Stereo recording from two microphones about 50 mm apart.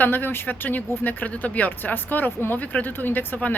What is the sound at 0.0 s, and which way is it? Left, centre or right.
A woman's voice, left.